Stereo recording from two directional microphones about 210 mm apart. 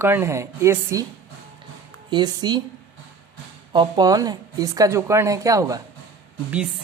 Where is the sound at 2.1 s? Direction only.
20° right (ahead or behind).